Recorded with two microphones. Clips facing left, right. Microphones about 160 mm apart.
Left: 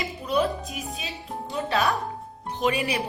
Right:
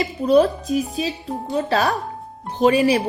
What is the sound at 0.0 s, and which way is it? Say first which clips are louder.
Speech: right 9 dB; 40° right (ahead or behind).